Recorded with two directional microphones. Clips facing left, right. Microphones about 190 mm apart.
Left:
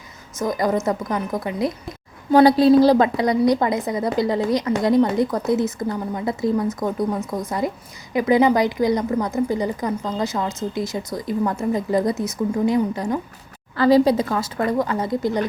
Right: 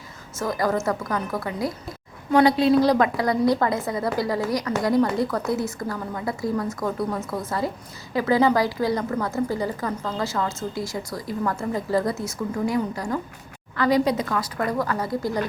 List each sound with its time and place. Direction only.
0.3 s a woman's voice: 20° left (ahead or behind)
2.3 s a woman's voice: 35° left (ahead or behind)